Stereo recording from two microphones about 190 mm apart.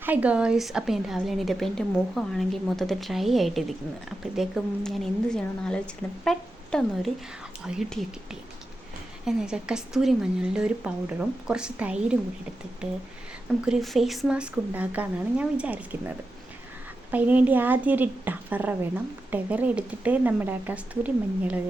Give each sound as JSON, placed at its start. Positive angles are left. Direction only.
{"t": 0.0, "sound": "a woman's voice", "side_deg": -10}
{"t": 13.7, "sound": "a woman's voice", "side_deg": 0}